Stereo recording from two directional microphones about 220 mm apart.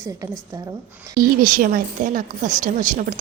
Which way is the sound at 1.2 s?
40° right (ahead or behind).